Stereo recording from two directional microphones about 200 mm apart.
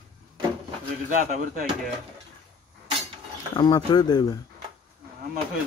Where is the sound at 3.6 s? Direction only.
20° left (ahead or behind).